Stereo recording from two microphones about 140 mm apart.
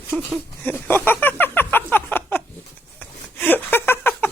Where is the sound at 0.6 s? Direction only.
15° left (ahead or behind).